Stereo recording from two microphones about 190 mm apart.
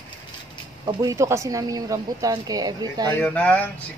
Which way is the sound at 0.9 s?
15° right (ahead or behind).